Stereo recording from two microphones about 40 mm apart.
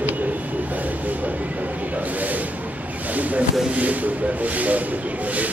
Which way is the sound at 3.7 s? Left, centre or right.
Right.